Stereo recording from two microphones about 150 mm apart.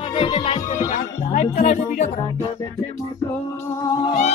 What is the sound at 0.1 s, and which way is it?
Speech, 35° left (ahead or behind).